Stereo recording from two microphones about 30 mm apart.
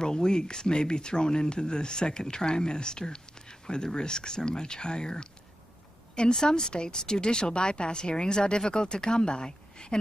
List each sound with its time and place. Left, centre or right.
0.0 s a woman's voice: left